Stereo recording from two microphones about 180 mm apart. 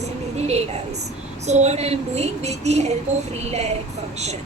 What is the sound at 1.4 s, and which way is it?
Speech, 40° right (ahead or behind).